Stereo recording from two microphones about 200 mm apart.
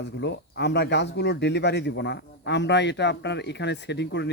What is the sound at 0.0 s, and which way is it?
A man's voice, 60° left (ahead or behind).